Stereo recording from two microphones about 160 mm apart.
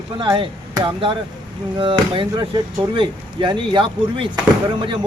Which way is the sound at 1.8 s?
30° right (ahead or behind).